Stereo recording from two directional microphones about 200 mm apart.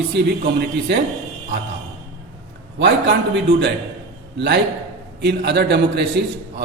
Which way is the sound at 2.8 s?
60° right (ahead or behind).